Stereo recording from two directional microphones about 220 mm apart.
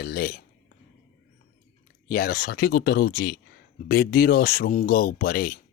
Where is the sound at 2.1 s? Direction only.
40° left (ahead or behind).